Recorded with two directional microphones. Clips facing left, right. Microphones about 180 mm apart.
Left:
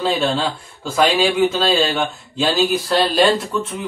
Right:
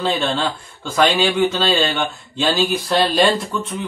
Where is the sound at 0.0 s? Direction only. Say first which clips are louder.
Left 1 dB; 5° left (ahead or behind).